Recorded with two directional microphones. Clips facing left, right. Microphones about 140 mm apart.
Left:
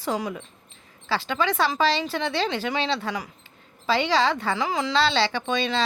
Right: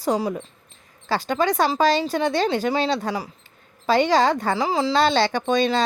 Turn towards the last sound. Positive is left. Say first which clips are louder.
# right 5 dB
turn(degrees=-45)  # may be behind; listen again after turning